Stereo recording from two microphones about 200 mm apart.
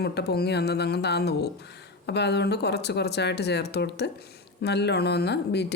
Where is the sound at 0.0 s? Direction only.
55° left (ahead or behind).